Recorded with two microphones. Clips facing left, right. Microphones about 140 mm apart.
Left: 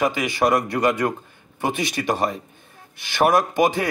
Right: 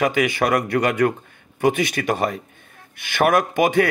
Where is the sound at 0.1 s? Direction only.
55° right (ahead or behind).